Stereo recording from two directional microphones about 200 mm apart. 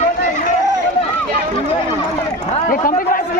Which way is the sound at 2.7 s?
45° left (ahead or behind).